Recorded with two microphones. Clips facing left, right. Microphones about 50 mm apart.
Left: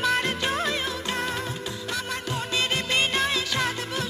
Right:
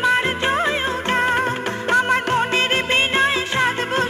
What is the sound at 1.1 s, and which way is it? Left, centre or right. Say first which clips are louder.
Music: right 10 dB; right.